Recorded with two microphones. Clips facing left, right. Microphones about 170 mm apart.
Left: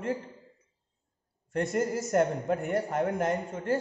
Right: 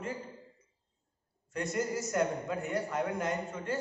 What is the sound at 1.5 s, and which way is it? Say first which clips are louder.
A man's voice: left 5 dB; 55° left (ahead or behind).